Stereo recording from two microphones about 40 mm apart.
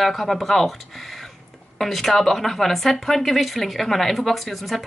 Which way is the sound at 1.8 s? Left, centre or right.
Centre.